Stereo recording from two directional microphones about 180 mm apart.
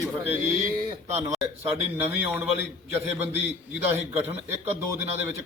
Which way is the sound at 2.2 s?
10° right (ahead or behind).